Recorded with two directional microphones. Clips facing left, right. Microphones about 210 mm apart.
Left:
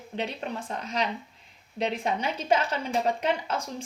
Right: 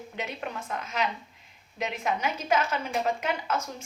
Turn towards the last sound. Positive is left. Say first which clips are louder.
# left 2 dB
turn(degrees=35)  # may be behind; listen again after turning